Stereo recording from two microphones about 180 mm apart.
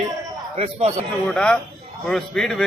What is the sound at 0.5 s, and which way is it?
Speech, 35° right (ahead or behind).